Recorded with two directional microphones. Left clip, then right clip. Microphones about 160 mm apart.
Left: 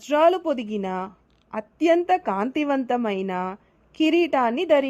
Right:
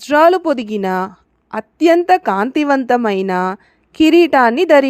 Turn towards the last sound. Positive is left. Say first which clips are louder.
# right 10 dB
turn(degrees=-30)  # may be behind; listen again after turning